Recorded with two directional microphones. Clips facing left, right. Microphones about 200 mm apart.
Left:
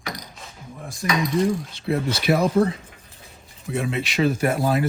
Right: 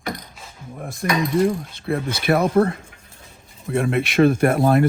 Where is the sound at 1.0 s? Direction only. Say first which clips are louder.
Right 2 dB; 55° right (ahead or behind).